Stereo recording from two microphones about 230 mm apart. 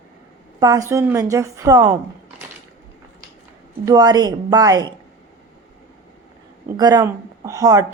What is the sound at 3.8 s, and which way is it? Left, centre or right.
A woman's voice, centre.